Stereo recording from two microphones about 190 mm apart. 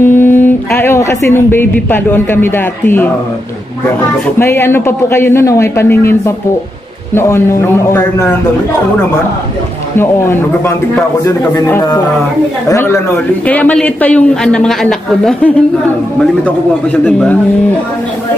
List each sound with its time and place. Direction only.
0.0 s speech: 10° left (ahead or behind)
4.4 s speech: 15° left (ahead or behind)
9.9 s a man's voice: 10° left (ahead or behind)